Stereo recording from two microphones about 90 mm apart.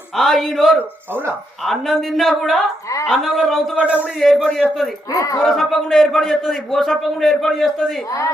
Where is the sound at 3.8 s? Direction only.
15° right (ahead or behind).